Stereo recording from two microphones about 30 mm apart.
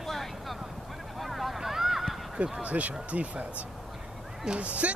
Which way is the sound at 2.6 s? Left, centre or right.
Right.